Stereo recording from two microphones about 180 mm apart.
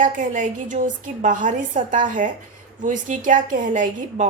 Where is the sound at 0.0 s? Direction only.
45° right (ahead or behind).